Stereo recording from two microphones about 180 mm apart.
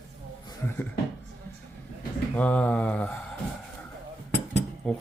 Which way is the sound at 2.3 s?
10° left (ahead or behind).